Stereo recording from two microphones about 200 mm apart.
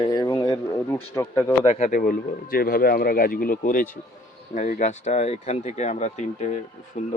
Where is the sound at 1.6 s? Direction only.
35° left (ahead or behind).